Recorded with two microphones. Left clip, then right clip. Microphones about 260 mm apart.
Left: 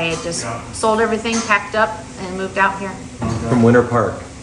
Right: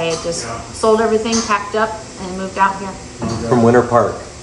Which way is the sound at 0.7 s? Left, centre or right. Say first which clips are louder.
Right 3 dB; left.